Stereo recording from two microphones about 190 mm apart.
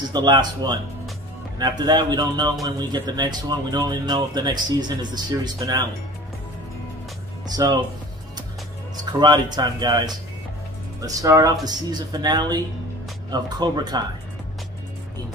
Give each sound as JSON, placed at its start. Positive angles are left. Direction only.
{"t": 0.1, "sound": "speech", "side_deg": -20}
{"t": 7.4, "sound": "speech", "side_deg": -20}
{"t": 9.2, "sound": "speech", "side_deg": -20}